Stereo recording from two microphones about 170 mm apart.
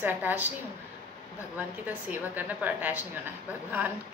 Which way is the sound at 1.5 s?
10° right (ahead or behind).